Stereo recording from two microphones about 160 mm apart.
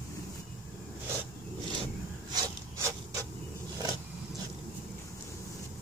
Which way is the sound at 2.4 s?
20° right (ahead or behind).